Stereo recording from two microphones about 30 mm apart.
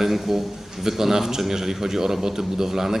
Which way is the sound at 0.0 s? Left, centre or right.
Centre.